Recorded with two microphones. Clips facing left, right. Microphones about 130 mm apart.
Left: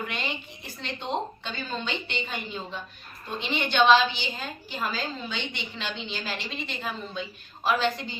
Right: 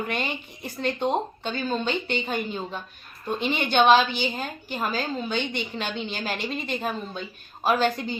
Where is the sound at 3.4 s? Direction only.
50° right (ahead or behind).